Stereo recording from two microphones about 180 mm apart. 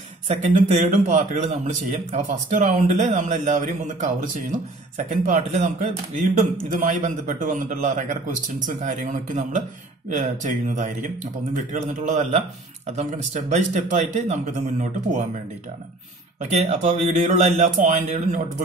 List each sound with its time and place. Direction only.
0.3 s a man's voice: 40° right (ahead or behind)
16.5 s speech: 40° right (ahead or behind)